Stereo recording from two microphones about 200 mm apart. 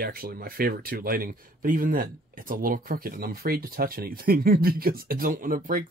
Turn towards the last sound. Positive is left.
turn(degrees=-45)  # may be behind; listen again after turning